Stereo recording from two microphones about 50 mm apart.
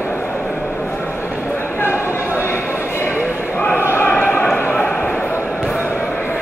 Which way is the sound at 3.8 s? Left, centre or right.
Left.